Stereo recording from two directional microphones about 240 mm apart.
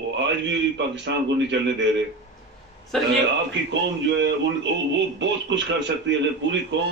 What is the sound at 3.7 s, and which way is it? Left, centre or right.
Speech, right.